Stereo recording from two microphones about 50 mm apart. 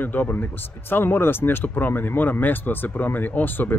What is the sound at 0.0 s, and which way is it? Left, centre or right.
Speech, left.